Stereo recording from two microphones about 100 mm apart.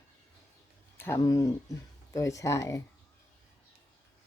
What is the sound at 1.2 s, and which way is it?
Speech, 35° left (ahead or behind).